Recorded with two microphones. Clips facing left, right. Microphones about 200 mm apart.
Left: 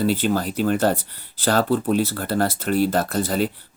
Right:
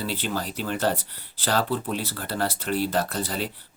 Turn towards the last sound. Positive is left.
turn(degrees=45)  # may be behind; listen again after turning